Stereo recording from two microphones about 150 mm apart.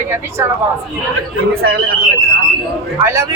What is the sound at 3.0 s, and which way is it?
Speech, 20° right (ahead or behind).